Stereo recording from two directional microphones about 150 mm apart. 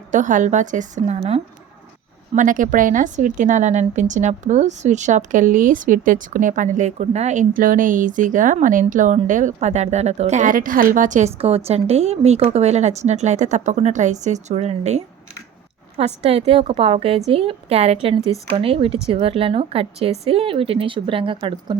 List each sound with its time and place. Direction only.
0.1 s a woman's voice: 55° right (ahead or behind)
2.3 s a woman's voice: 60° right (ahead or behind)
11.3 s a woman's voice: 40° right (ahead or behind)